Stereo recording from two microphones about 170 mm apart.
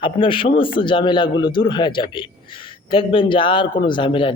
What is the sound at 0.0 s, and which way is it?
Speech, 30° left (ahead or behind).